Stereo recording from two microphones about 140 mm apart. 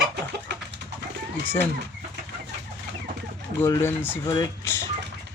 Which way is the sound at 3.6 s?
20° left (ahead or behind).